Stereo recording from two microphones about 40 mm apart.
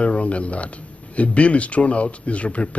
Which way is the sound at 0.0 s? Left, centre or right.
Left.